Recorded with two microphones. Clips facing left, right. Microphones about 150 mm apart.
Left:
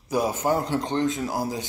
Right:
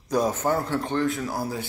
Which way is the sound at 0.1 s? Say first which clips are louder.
Even; 10° left (ahead or behind).